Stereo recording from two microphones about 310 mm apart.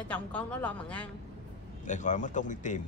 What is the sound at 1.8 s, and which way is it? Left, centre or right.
Speech, left.